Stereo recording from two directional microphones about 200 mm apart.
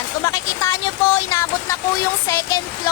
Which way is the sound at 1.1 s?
15° left (ahead or behind).